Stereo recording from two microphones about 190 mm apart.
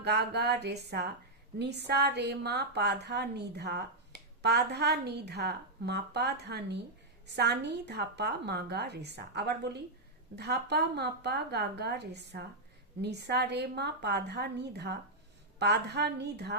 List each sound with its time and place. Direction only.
0.0 s a woman's voice: 60° right (ahead or behind)